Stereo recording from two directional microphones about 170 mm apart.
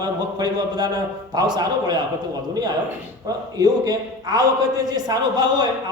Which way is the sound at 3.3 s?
20° right (ahead or behind).